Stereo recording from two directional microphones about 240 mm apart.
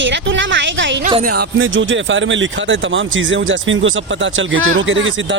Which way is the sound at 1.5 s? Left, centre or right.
Right.